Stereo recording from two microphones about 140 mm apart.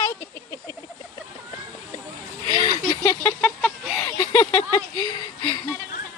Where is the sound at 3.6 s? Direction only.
Centre (ahead or behind).